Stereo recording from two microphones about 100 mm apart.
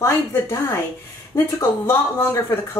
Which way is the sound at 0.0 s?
30° left (ahead or behind).